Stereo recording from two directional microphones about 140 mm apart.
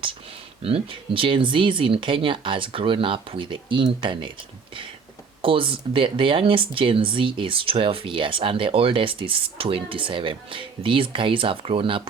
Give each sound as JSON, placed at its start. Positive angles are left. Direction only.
{"t": 0.6, "sound": "speech", "side_deg": -40}
{"t": 5.4, "sound": "speech", "side_deg": -40}